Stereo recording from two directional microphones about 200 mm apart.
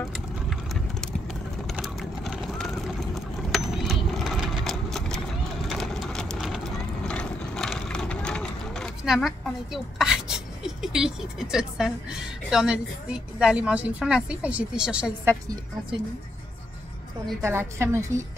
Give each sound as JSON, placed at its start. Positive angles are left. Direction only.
{"t": 1.7, "sound": "vehicle", "side_deg": 0}
{"t": 3.5, "sound": "a sound", "side_deg": 0}
{"t": 15.4, "sound": "a woman's voice", "side_deg": -20}
{"t": 17.4, "sound": "a woman's voice", "side_deg": -15}